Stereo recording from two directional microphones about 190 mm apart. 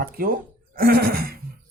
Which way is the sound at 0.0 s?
50° right (ahead or behind).